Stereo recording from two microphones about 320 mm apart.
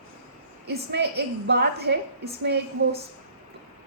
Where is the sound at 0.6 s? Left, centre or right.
Right.